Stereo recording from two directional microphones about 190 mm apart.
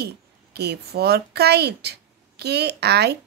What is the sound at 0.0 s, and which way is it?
A woman's voice, 60° right (ahead or behind).